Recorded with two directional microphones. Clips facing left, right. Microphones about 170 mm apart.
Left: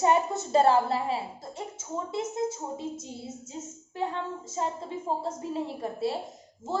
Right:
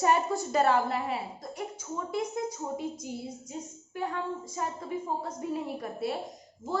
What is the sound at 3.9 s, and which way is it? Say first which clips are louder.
A woman's voice: left 1 dB; 25° left (ahead or behind).